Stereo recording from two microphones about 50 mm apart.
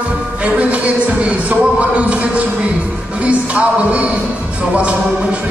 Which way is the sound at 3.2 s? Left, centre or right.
Right.